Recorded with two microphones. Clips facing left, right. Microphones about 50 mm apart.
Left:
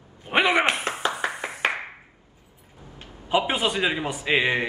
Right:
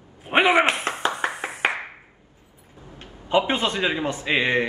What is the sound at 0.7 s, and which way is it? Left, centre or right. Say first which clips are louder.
Speech: right 1 dB; right.